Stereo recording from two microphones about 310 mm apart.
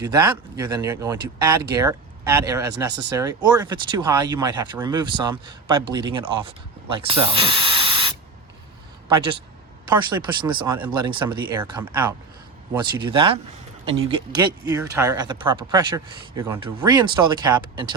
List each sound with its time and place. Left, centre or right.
0.1 s speech: centre
9.9 s speech: centre